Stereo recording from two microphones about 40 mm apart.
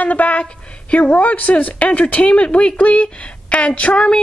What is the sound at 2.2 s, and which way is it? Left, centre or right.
A woman's voice, left.